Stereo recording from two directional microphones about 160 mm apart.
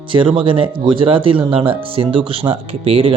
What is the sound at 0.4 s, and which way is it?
Speech, 30° right (ahead or behind).